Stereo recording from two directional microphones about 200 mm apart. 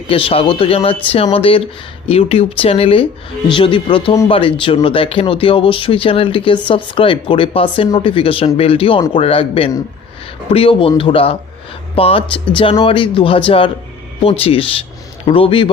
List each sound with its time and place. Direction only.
0.1 s speech: 30° left (ahead or behind)